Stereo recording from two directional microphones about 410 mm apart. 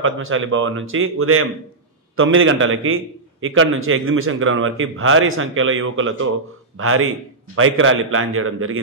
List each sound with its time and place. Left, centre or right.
0.0 s a man's voice: right